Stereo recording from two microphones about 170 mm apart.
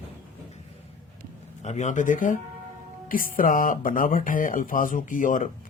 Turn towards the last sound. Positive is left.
turn(degrees=50)  # may be behind; listen again after turning